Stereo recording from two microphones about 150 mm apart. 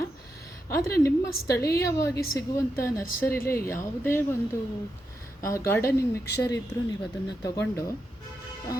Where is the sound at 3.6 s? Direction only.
65° left (ahead or behind).